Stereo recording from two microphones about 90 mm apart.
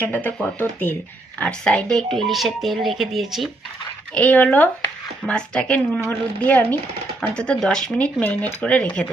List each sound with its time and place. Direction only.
0.0 s a woman's voice: 20° left (ahead or behind)
1.4 s speech: 15° left (ahead or behind)
4.1 s a woman's voice: 15° left (ahead or behind)